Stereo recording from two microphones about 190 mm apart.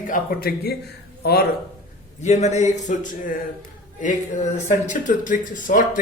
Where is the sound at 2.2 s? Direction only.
35° left (ahead or behind).